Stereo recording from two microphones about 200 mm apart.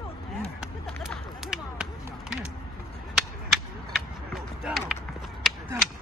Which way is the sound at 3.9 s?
Centre (ahead or behind).